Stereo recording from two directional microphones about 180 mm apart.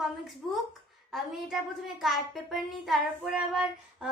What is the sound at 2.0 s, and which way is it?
A child's voice, centre (ahead or behind).